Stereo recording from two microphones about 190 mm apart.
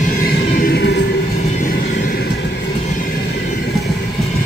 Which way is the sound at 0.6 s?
50° left (ahead or behind).